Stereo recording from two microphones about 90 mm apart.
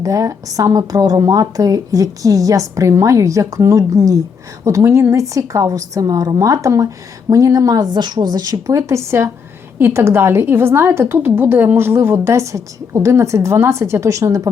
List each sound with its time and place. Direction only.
0.0 s a woman's voice: 40° right (ahead or behind)